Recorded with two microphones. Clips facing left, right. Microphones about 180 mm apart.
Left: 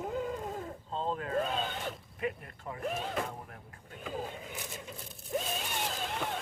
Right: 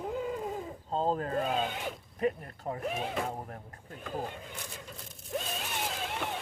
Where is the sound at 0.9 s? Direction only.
40° right (ahead or behind).